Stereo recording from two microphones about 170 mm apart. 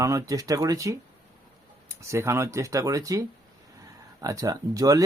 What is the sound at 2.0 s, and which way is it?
Speech, 15° right (ahead or behind).